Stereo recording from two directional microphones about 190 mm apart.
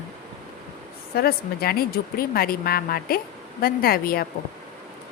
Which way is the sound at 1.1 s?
55° left (ahead or behind).